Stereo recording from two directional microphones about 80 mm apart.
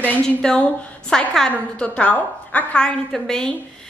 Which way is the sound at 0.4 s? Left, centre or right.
Centre.